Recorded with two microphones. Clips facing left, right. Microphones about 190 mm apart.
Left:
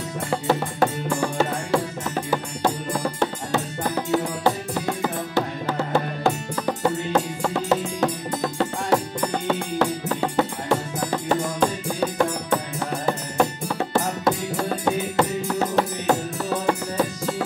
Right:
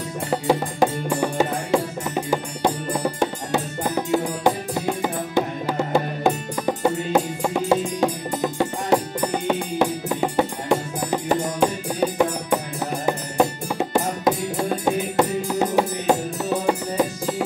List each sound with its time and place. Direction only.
0.3 s music: 15° right (ahead or behind)